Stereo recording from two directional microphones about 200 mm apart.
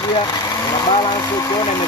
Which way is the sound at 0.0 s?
20° left (ahead or behind).